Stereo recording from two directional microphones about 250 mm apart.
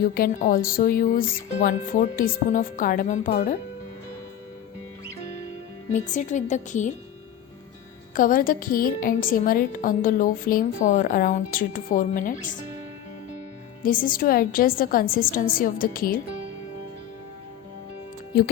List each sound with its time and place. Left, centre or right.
0.0 s a woman's voice: left
5.9 s a woman's voice: left
8.1 s a woman's voice: left
13.8 s a woman's voice: left